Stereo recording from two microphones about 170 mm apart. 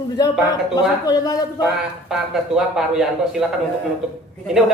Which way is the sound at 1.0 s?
25° left (ahead or behind).